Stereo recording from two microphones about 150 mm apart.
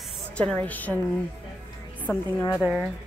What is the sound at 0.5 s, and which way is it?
Speech, 10° left (ahead or behind).